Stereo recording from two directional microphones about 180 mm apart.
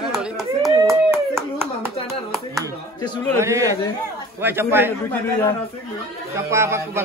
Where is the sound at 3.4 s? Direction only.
15° right (ahead or behind).